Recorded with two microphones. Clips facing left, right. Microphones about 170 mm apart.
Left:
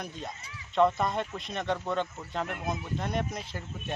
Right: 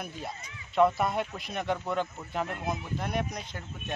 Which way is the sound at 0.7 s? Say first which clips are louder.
Right 1 dB; 5° right (ahead or behind).